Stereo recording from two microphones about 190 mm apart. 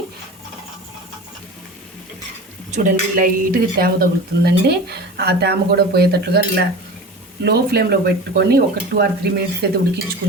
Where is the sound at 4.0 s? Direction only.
55° right (ahead or behind).